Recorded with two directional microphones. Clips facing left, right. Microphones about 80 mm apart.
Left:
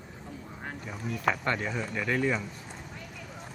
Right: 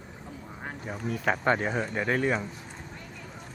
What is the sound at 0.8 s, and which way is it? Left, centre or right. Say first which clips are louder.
Speech: right 1 dB; right.